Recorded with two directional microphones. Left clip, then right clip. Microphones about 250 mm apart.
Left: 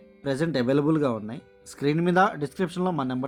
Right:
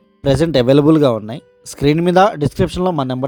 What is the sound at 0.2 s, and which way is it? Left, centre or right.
Speech, right.